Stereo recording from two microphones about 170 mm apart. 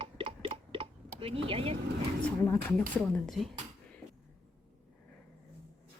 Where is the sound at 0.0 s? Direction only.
30° right (ahead or behind).